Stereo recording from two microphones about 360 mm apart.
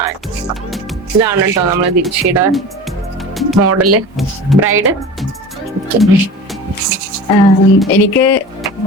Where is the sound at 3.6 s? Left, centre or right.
Right.